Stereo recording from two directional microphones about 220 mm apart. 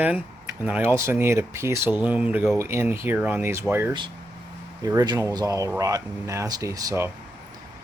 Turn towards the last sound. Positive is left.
turn(degrees=-15)  # may be behind; listen again after turning